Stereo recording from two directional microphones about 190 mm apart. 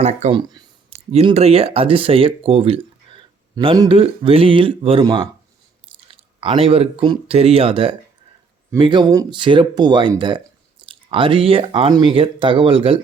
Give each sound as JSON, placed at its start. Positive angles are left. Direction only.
{"t": 0.0, "sound": "speech", "side_deg": -35}
{"t": 0.3, "sound": "speech", "side_deg": -20}
{"t": 0.9, "sound": "speech", "side_deg": -30}
{"t": 6.4, "sound": "speech", "side_deg": -30}